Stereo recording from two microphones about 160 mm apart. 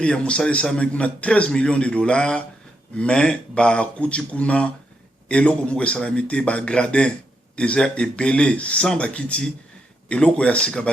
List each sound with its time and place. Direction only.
0.0 s a man's voice: 5° left (ahead or behind)